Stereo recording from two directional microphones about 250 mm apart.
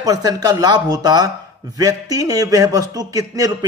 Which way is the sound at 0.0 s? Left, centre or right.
Centre.